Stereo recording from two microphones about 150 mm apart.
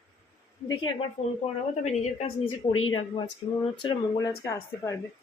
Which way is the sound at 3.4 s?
30° left (ahead or behind).